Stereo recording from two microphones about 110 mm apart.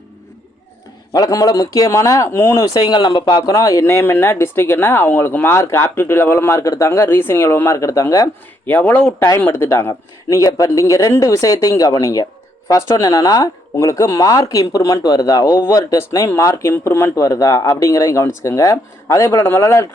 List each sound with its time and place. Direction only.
1.1 s a man's voice: 35° left (ahead or behind)
8.6 s speech: 15° left (ahead or behind)
9.4 s a man's voice: 25° left (ahead or behind)